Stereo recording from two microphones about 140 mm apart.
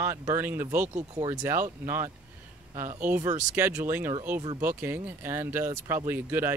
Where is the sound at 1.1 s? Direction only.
25° right (ahead or behind).